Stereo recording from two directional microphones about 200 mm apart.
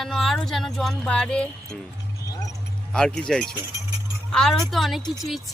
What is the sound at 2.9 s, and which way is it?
Speech, 5° left (ahead or behind).